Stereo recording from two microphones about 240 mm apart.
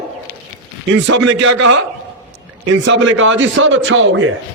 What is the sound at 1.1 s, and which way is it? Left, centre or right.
A man's voice, right.